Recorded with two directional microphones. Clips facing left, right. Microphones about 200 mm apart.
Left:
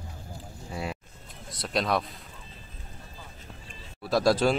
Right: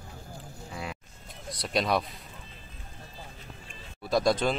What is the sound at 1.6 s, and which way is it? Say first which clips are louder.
Speech: even; centre (ahead or behind).